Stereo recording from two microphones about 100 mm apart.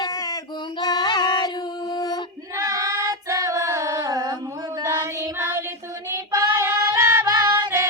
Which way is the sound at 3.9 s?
40° right (ahead or behind).